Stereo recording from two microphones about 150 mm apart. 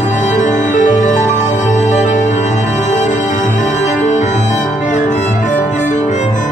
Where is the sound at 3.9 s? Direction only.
55° left (ahead or behind).